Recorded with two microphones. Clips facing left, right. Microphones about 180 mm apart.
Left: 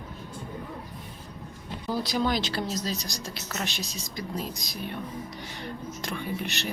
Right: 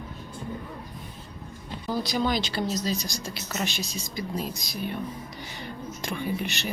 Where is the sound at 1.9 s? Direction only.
Centre (ahead or behind).